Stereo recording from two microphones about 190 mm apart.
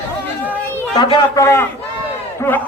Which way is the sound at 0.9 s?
20° left (ahead or behind).